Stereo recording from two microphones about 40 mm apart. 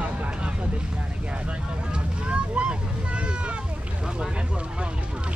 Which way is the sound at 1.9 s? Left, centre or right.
Right.